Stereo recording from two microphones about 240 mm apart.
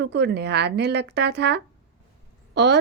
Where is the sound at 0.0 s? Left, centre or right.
Right.